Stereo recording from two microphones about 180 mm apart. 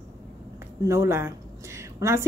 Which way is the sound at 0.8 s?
15° right (ahead or behind).